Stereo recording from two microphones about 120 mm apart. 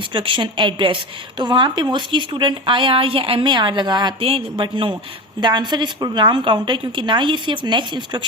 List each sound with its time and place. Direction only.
0.1 s speech: 45° right (ahead or behind)